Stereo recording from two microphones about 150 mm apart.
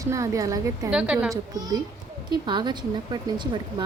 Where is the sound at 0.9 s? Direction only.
10° right (ahead or behind).